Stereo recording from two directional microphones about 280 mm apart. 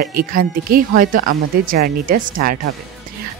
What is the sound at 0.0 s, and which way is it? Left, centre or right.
Speech, right.